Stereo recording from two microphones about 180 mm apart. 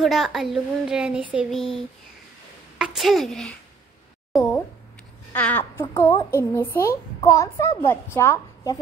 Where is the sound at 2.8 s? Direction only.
Centre (ahead or behind).